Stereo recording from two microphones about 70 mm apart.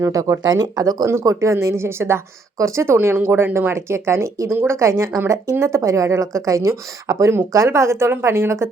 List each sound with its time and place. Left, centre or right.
0.0 s speech: right
1.0 s speech: right